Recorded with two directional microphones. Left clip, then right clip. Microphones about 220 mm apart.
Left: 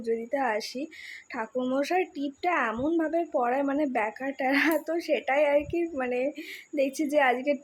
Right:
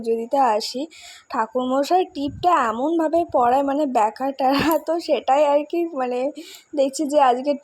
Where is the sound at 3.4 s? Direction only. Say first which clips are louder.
Right 8 dB; 5° left (ahead or behind).